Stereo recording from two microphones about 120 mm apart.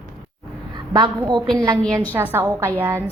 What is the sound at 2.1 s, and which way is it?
Speech, 20° right (ahead or behind).